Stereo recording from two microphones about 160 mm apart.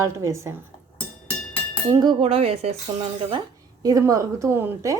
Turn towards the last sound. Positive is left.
turn(degrees=-15)  # may be behind; listen again after turning